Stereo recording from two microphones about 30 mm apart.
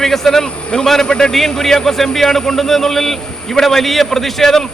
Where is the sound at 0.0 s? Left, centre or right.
Centre.